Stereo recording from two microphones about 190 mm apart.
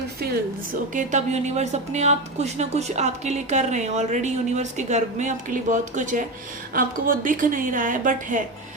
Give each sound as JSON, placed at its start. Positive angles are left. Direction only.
{"t": 0.9, "sound": "a woman's voice", "side_deg": -40}